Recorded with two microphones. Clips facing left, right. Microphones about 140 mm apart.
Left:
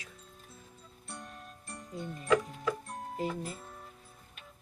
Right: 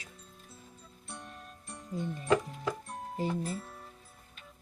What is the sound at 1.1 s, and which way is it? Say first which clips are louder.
Music: even; centre (ahead or behind).